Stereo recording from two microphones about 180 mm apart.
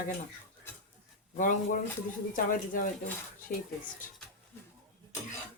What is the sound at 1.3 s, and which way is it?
Speech, 45° left (ahead or behind).